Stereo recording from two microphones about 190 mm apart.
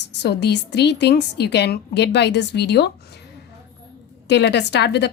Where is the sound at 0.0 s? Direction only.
65° left (ahead or behind).